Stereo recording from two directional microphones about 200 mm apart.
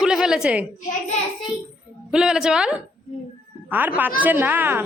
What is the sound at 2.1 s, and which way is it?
A woman's voice, 5° right (ahead or behind).